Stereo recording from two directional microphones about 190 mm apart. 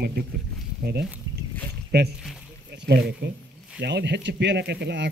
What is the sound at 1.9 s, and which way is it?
Speech, 60° right (ahead or behind).